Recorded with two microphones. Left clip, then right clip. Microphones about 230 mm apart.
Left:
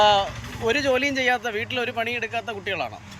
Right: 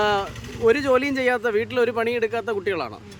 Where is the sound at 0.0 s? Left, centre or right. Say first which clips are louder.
Left 4 dB; centre.